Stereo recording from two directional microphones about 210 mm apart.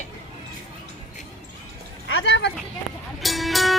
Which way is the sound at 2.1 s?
70° left (ahead or behind).